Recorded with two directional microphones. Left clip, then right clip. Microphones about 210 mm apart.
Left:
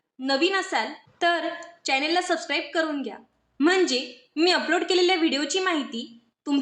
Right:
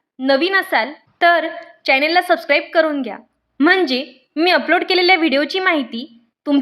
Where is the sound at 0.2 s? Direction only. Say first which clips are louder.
Right 8 dB; 40° right (ahead or behind).